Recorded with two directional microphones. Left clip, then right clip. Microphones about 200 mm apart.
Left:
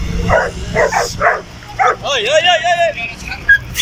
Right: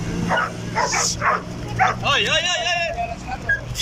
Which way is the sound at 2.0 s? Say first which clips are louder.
Left 6 dB; 30° left (ahead or behind).